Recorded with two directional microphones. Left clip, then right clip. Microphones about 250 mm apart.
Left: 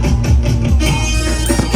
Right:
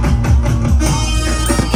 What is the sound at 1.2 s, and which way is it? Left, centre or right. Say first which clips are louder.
Music: even; centre.